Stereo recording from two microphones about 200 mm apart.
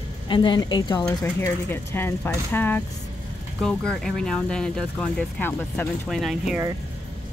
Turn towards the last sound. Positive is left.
turn(degrees=0)  # may be behind; listen again after turning